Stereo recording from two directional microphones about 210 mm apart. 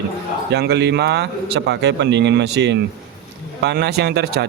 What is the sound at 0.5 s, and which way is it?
A man's voice, 50° right (ahead or behind).